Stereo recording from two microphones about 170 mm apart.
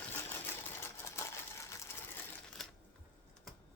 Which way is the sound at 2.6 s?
5° left (ahead or behind).